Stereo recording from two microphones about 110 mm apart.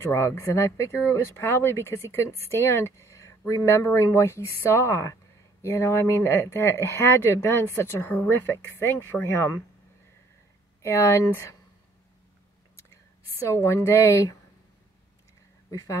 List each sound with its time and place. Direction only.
0.0 s speech: 25° left (ahead or behind)
10.8 s speech: 25° left (ahead or behind)
13.5 s speech: 25° left (ahead or behind)